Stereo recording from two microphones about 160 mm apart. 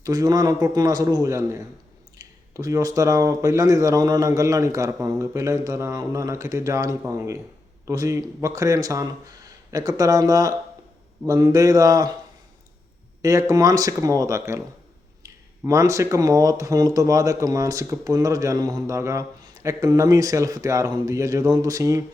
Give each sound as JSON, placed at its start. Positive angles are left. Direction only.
{"t": 0.0, "sound": "speech", "side_deg": -20}
{"t": 13.2, "sound": "speech", "side_deg": -20}